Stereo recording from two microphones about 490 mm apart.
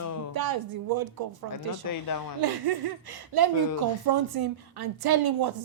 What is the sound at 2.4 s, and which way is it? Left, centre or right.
A woman's voice, right.